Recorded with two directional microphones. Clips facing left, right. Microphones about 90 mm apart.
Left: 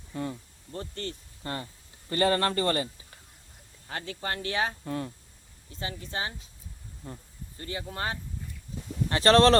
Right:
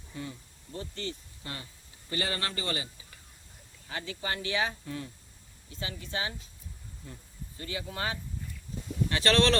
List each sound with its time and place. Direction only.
0.1 s speech: 50° left (ahead or behind)
5.8 s speech: 35° left (ahead or behind)